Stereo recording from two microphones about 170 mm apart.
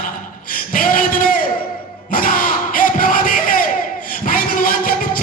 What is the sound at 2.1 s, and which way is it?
Crowd, 55° left (ahead or behind).